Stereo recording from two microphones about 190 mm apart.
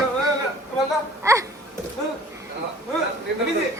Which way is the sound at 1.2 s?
15° right (ahead or behind).